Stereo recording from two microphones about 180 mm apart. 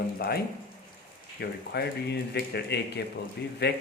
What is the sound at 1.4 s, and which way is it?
Speech, 65° left (ahead or behind).